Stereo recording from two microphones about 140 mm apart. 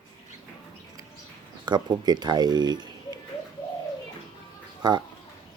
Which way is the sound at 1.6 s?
30° right (ahead or behind).